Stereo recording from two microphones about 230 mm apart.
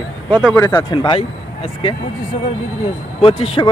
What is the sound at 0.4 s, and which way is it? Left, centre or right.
Speech, centre.